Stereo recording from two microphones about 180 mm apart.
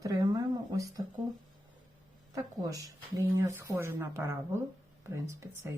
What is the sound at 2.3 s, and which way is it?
A woman's voice, 20° right (ahead or behind).